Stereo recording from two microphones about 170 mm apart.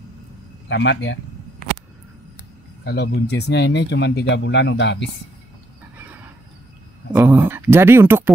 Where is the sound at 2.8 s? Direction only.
80° left.